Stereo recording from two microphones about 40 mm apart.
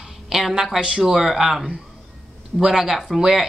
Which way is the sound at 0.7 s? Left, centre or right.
Right.